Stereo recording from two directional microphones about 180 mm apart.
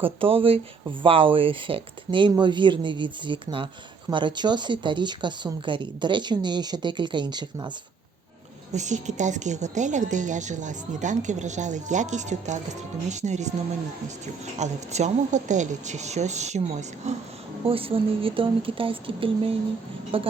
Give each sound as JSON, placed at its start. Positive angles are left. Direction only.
{"t": 0.0, "sound": "speech", "side_deg": -30}
{"t": 8.7, "sound": "a woman's voice", "side_deg": -40}
{"t": 14.6, "sound": "speech", "side_deg": -40}